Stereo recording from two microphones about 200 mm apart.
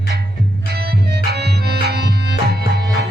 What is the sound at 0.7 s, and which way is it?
Music, 55° right (ahead or behind).